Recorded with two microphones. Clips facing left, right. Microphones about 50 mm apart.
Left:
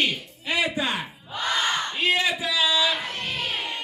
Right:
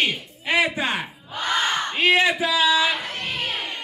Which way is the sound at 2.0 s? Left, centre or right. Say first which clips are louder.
Right 6 dB; right.